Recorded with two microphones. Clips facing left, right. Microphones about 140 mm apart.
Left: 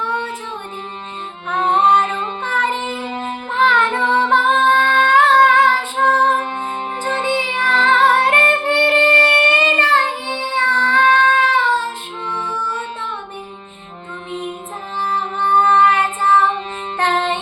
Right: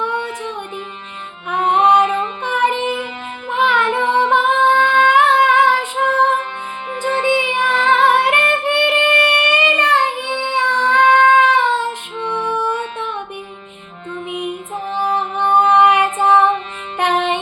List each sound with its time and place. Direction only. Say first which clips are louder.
1.5 s music: right 2 dB; 10° right (ahead or behind)
3.5 s female singing: even; 15° right (ahead or behind)
7.0 s music: right 4 dB; 35° left (ahead or behind)
7.7 s female singing: even; 10° right (ahead or behind)
8.9 s music: left 1 dB; 15° right (ahead or behind)
9.5 s child singing: even; 15° right (ahead or behind)
14.9 s music: right 2 dB; 15° right (ahead or behind)